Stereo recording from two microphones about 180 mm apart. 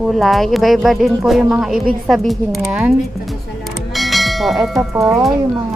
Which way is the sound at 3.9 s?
Centre (ahead or behind).